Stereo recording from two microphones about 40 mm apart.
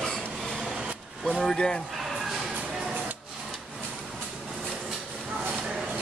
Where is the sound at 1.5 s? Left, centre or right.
Left.